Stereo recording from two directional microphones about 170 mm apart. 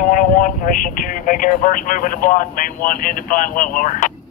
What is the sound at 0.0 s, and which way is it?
Speech, 50° left (ahead or behind).